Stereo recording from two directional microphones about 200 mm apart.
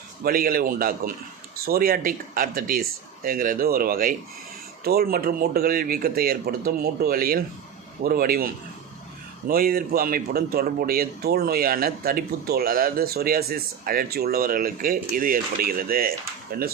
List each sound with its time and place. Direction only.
0.2 s speech: 45° right (ahead or behind)
9.5 s speech: 50° right (ahead or behind)